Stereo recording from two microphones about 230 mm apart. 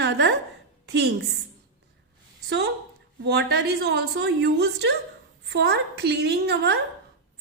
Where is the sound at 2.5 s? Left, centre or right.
Right.